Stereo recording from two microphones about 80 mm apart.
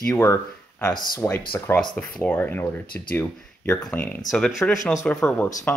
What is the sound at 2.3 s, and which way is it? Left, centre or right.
Speech, left.